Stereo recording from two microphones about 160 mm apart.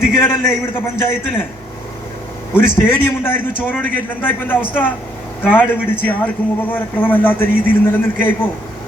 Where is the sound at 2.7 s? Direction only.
15° left (ahead or behind).